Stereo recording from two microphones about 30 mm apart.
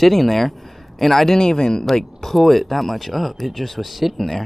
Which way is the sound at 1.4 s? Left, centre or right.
Left.